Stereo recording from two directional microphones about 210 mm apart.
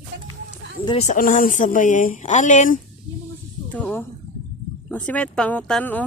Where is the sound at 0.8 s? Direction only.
30° left (ahead or behind).